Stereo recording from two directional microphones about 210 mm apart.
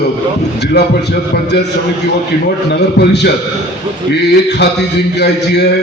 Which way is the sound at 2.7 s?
50° left (ahead or behind).